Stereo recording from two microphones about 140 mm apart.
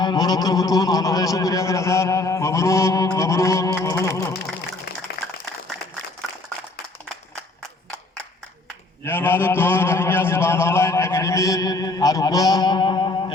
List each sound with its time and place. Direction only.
0.0 s speech: 30° left (ahead or behind)
9.0 s a man's voice: 15° left (ahead or behind); by 13.3 s 35° left (ahead or behind)